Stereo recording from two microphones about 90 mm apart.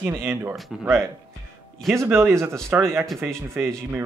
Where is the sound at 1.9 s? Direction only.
30° right (ahead or behind).